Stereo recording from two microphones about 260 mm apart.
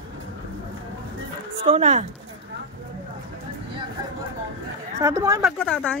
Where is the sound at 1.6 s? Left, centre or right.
Right.